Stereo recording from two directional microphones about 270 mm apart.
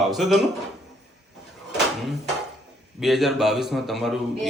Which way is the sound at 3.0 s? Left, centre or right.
Centre.